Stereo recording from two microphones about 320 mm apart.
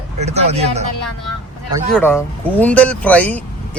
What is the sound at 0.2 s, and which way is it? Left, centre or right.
Speech, centre.